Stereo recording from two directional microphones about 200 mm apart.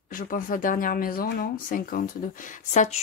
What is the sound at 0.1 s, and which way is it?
Speech, 45° left (ahead or behind).